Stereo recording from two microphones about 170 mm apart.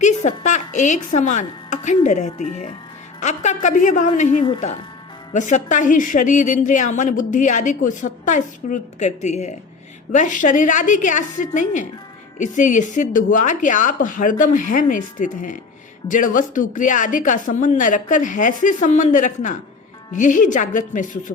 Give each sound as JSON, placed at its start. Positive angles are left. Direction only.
{"t": 0.0, "sound": "a woman's voice", "side_deg": 45}